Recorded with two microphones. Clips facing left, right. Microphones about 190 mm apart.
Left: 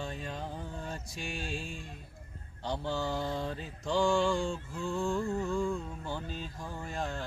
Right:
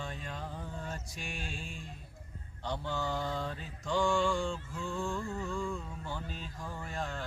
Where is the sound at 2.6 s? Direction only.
30° left (ahead or behind).